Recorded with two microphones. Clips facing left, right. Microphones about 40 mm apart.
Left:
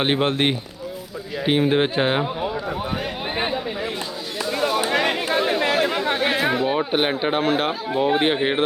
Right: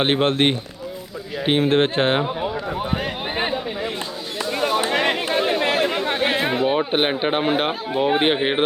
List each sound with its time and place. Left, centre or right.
0.0 s a man's voice: right
1.6 s speech: centre
2.0 s run: centre
3.3 s chatter: centre
4.4 s a sound: centre
4.9 s chatter: centre
6.4 s speech: centre